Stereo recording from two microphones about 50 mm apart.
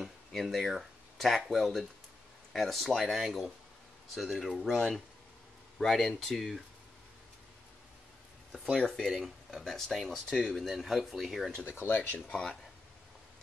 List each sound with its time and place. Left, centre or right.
0.3 s speech: centre
8.7 s speech: centre
11.6 s speech: left
12.3 s speech: centre